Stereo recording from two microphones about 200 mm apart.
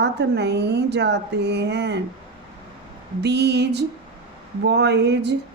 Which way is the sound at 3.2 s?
55° right (ahead or behind).